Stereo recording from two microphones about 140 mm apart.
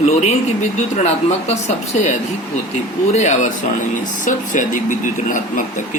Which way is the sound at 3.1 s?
55° left (ahead or behind).